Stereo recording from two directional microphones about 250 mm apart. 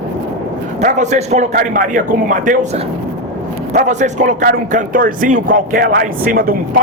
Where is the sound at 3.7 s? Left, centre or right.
Right.